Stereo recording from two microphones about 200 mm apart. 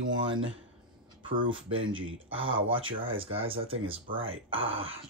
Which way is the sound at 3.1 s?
25° right (ahead or behind).